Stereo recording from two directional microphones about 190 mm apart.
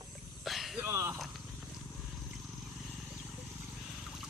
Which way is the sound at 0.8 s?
15° right (ahead or behind).